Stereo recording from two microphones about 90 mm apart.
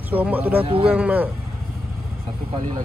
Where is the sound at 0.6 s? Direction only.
90° right.